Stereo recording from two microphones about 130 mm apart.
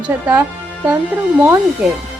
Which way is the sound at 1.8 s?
5° right (ahead or behind).